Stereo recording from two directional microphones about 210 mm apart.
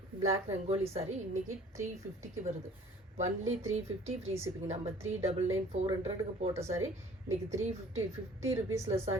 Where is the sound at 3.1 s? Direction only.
30° right (ahead or behind).